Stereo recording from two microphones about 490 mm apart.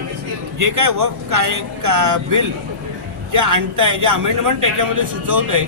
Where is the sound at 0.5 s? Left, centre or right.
Right.